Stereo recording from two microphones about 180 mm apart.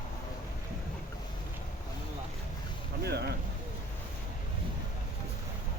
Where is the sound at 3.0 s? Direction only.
65° right (ahead or behind).